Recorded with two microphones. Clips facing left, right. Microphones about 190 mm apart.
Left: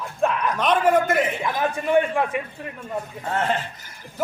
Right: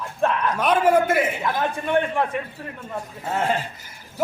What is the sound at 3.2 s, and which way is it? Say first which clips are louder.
Speech: right 1 dB; 10° right (ahead or behind).